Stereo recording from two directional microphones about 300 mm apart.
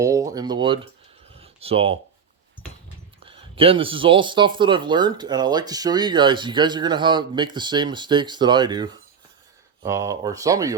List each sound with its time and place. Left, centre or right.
0.0 s speech: centre
1.4 s a sound: centre
3.2 s speech: centre